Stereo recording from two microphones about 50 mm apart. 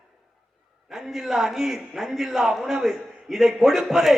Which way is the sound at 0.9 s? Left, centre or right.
Centre.